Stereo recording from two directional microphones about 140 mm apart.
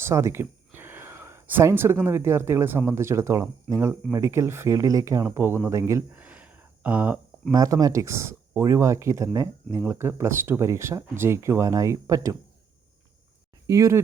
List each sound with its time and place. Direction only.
0.0 s a sound: 20° right (ahead or behind)
2.0 s speech: 20° right (ahead or behind)
7.5 s speech: 25° right (ahead or behind)
13.7 s speech: 20° right (ahead or behind)